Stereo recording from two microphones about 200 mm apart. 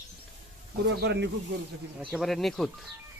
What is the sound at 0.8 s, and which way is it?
Speech, 55° right (ahead or behind).